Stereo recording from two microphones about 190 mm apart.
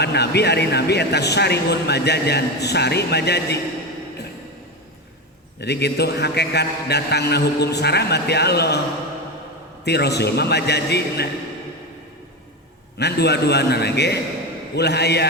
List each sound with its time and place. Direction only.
0.0 s speech: 60° left (ahead or behind)
5.5 s speech: 60° left (ahead or behind)
9.8 s speech: 60° left (ahead or behind)
13.0 s speech: 60° left (ahead or behind)